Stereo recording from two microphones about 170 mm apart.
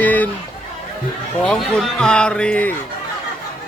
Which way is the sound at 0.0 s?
10° left (ahead or behind).